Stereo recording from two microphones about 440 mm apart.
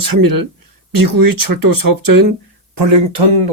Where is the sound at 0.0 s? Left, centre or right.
Right.